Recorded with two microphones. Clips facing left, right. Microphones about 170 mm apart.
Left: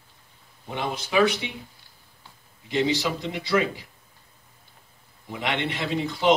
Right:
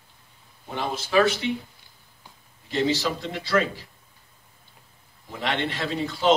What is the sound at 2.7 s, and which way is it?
A man's voice, 15° left (ahead or behind).